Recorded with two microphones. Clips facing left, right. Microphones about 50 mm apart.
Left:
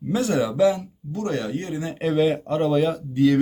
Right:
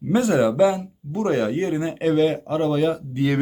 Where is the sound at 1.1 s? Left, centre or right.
Right.